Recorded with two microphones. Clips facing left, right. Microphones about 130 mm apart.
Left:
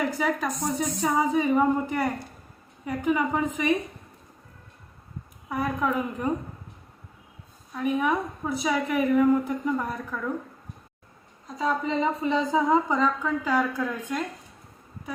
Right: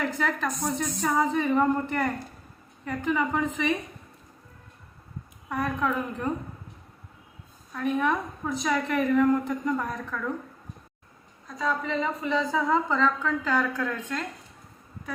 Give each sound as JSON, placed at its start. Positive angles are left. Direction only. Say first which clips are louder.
{"t": 0.0, "sound": "a woman's voice", "louder": "left 2 dB", "side_deg": 10}
{"t": 5.5, "sound": "a woman's voice", "louder": "left 1 dB", "side_deg": 10}
{"t": 7.7, "sound": "a woman's voice", "louder": "left 1 dB", "side_deg": 10}
{"t": 11.4, "sound": "a woman's voice", "louder": "left 2 dB", "side_deg": 20}